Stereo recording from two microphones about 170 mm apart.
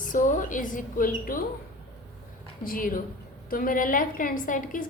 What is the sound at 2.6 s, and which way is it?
A woman's voice, 55° left (ahead or behind).